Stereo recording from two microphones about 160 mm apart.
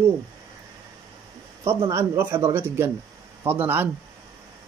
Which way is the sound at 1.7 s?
15° right (ahead or behind).